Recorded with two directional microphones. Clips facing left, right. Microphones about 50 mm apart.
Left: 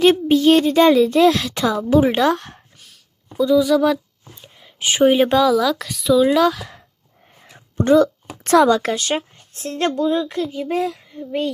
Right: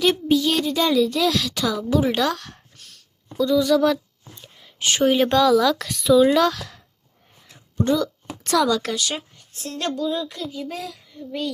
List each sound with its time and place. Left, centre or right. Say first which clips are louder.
0.0 s a woman's voice: left 5 dB; left
2.7 s speech: even; centre
7.8 s a woman's voice: left 7 dB; left